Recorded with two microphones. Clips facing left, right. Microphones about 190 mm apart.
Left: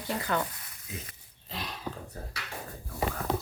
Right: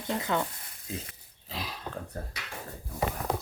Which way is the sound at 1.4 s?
Centre (ahead or behind).